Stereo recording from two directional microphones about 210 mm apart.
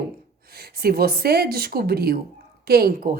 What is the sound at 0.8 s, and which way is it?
A woman's voice, 45° right (ahead or behind).